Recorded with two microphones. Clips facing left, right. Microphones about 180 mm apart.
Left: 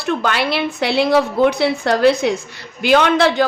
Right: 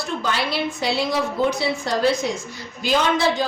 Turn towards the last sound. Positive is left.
turn(degrees=70)  # may be behind; listen again after turning